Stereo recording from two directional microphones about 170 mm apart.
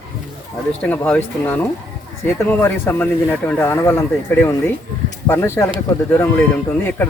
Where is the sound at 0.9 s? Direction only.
10° left (ahead or behind).